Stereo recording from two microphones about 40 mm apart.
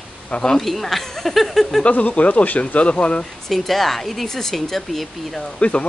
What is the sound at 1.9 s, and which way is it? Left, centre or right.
Speech, left.